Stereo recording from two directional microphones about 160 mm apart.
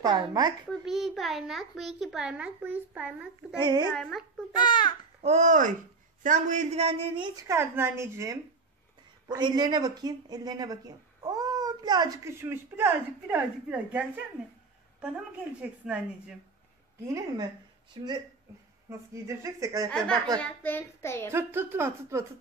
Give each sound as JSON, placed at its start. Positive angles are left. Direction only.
{"t": 0.0, "sound": "a child's voice", "side_deg": -25}
{"t": 0.7, "sound": "a child's voice", "side_deg": 0}
{"t": 3.5, "sound": "a child's voice", "side_deg": -30}
{"t": 3.9, "sound": "a child's voice", "side_deg": 0}
{"t": 4.6, "sound": "speech", "side_deg": 30}
{"t": 5.2, "sound": "speech", "side_deg": -45}
{"t": 7.3, "sound": "a woman's voice", "side_deg": -15}
{"t": 17.9, "sound": "a child's voice", "side_deg": -30}
{"t": 18.9, "sound": "a child's voice", "side_deg": -20}
{"t": 20.3, "sound": "a child's voice", "side_deg": 10}
{"t": 21.3, "sound": "a woman's voice", "side_deg": -15}